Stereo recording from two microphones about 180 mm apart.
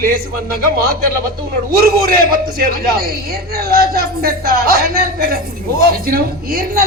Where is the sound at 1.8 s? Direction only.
55° right (ahead or behind).